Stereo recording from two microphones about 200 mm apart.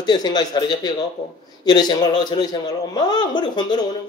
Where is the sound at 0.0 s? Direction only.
20° left (ahead or behind).